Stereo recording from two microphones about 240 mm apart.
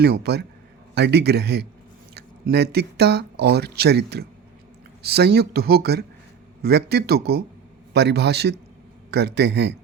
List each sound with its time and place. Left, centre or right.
0.0 s a man's voice: right